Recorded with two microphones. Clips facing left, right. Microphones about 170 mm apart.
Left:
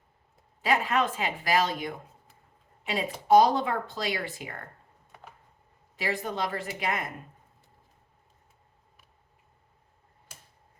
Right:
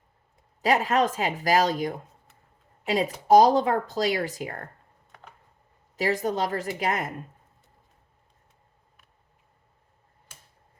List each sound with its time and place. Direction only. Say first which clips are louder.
0.6 s speech: right 4 dB; 40° right (ahead or behind)
6.0 s speech: right 5 dB; 40° right (ahead or behind)